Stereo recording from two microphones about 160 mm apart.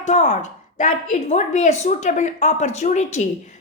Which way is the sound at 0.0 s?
45° left (ahead or behind).